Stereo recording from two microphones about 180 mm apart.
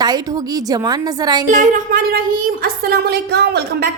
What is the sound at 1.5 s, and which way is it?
A woman's voice, 45° right (ahead or behind).